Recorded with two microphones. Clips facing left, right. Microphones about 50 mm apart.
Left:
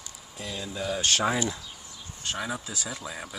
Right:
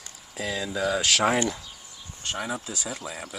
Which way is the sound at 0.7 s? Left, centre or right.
Right.